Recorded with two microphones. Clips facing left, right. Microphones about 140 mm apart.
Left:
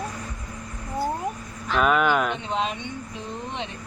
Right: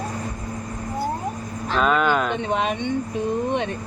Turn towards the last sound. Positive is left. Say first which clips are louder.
# right 10 dB
turn(degrees=-55)  # may be behind; listen again after turning